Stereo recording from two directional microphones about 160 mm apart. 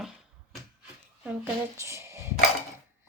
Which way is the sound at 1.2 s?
15° right (ahead or behind).